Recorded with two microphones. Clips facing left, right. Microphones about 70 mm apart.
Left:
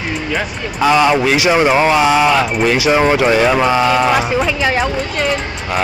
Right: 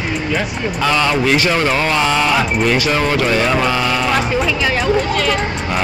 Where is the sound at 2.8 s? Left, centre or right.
Centre.